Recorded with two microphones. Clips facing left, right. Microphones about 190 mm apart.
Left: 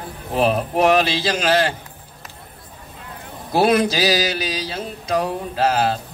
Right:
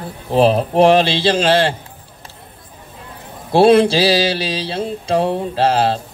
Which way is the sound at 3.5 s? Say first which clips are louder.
Right 6 dB; 30° right (ahead or behind).